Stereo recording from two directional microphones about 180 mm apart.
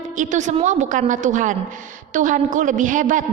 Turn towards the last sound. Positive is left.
turn(degrees=-45)  # may be behind; listen again after turning